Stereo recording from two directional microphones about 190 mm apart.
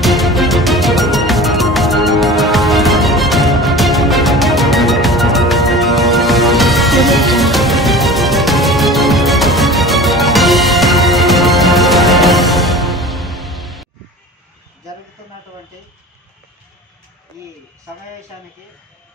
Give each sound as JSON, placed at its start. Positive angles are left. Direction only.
{"t": 0.0, "sound": "music", "side_deg": 0}